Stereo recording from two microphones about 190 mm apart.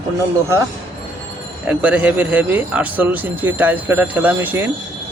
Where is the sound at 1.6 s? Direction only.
10° right (ahead or behind).